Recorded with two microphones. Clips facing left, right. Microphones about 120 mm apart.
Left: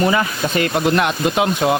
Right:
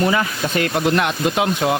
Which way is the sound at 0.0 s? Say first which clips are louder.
Left 1 dB; 15° left (ahead or behind).